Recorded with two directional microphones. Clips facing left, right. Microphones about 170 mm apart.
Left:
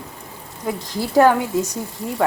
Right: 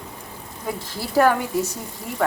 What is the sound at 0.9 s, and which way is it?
Speech, 15° left (ahead or behind).